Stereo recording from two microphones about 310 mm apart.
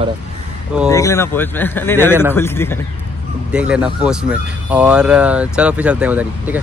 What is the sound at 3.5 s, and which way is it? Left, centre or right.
Speech, centre.